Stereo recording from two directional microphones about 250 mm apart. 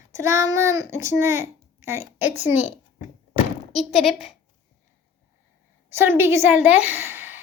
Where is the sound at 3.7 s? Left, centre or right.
Centre.